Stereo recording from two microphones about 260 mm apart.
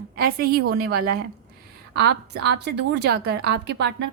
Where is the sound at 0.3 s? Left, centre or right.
Right.